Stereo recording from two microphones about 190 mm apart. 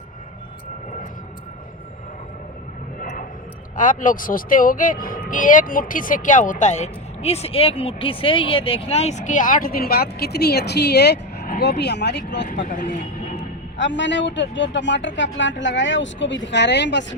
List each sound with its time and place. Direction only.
3.0 s vehicle: 45° left (ahead or behind)
3.8 s speech: 45° left (ahead or behind); by 12.5 s 65° left (ahead or behind)
12.5 s speech: 45° left (ahead or behind)
13.7 s speech: 70° left (ahead or behind)